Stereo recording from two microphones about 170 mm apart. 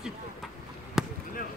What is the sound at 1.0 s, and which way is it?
Basketball bounce, 5° right (ahead or behind).